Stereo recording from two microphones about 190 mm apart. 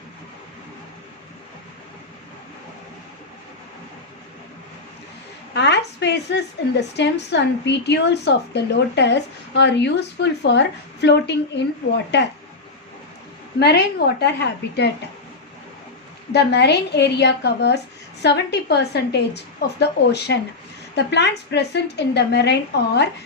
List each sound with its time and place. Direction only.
5.5 s a woman's voice: 65° left (ahead or behind)
13.6 s a woman's voice: 60° left (ahead or behind)
16.3 s a woman's voice: 65° left (ahead or behind)